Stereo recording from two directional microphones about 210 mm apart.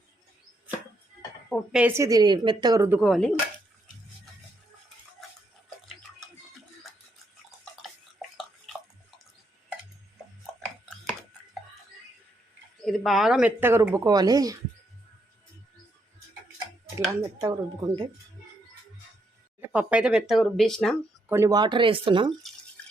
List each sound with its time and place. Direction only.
1.5 s a woman's voice: centre (ahead or behind)
3.0 s speech: centre (ahead or behind)
12.8 s a woman's voice: centre (ahead or behind); by 14.6 s 15° right (ahead or behind)
17.2 s a woman's voice: 15° right (ahead or behind)
19.6 s speech: 5° right (ahead or behind)
21.2 s speech: 15° right (ahead or behind)